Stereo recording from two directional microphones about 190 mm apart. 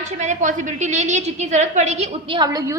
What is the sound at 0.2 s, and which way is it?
A woman's voice, 40° right (ahead or behind).